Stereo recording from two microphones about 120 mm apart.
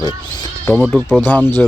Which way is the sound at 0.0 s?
35° left (ahead or behind).